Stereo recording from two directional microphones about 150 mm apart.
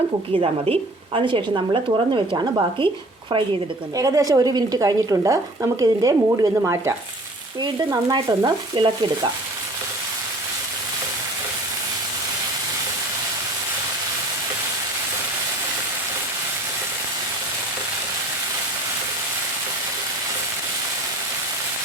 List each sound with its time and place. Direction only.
0.3 s a woman's voice: 40° right (ahead or behind)
3.9 s stir: 20° right (ahead or behind)